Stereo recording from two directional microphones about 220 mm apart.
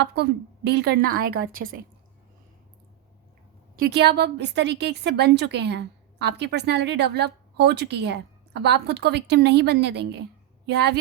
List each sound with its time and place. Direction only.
0.0 s a woman's voice: 50° right (ahead or behind)
3.8 s a woman's voice: 45° right (ahead or behind)